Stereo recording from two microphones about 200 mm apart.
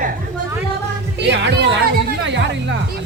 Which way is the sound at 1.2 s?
60° right (ahead or behind).